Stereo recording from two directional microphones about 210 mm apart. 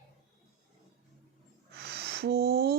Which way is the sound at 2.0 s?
50° right (ahead or behind).